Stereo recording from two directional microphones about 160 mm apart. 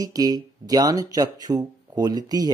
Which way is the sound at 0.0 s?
25° right (ahead or behind).